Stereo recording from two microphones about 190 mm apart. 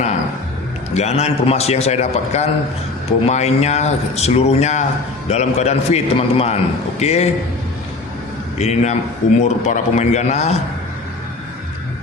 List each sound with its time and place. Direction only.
0.9 s speech: 35° left (ahead or behind)
8.5 s speech: 35° left (ahead or behind)